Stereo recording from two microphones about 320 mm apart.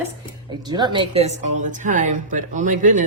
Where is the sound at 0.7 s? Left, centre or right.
Centre.